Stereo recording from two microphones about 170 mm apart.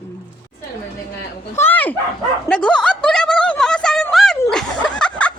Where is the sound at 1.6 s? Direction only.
10° left (ahead or behind).